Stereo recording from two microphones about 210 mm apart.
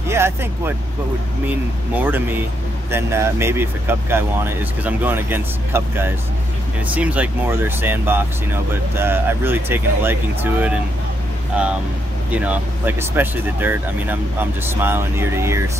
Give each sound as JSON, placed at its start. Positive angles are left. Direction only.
{"t": 0.1, "sound": "speech", "side_deg": -10}
{"t": 2.0, "sound": "speech", "side_deg": -10}
{"t": 12.3, "sound": "speech", "side_deg": -5}